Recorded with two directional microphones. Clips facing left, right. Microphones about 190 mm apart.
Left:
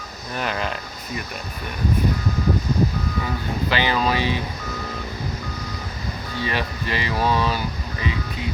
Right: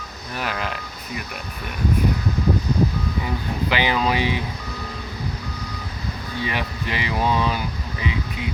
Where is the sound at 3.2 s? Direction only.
15° right (ahead or behind).